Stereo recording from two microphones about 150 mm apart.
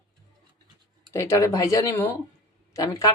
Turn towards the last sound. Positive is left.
turn(degrees=20)  # may be behind; listen again after turning